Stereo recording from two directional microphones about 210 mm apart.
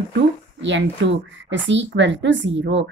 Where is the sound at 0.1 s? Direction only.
60° right (ahead or behind).